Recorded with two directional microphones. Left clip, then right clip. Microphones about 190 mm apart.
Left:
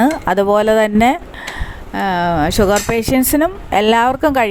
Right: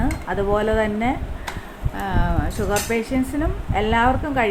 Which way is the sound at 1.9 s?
45° left (ahead or behind).